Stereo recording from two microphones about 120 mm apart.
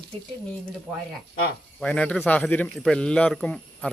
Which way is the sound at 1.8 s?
10° left (ahead or behind).